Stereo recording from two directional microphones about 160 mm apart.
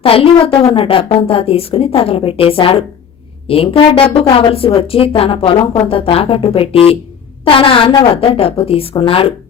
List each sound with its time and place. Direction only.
0.0 s speech: 35° left (ahead or behind)